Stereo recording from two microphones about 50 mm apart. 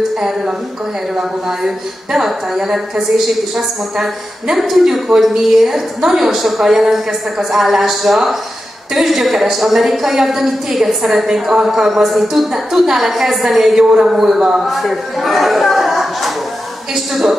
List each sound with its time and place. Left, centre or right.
2.1 s a woman's voice: centre